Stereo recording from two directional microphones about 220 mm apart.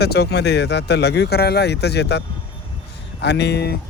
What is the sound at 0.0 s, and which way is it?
Speech, 45° left (ahead or behind).